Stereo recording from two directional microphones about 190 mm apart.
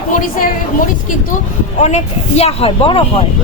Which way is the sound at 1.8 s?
35° left (ahead or behind).